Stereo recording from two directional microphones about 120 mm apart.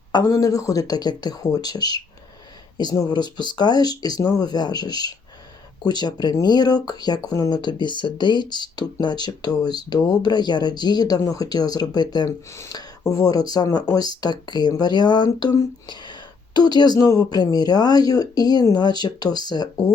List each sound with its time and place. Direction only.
0.1 s speech: 30° left (ahead or behind)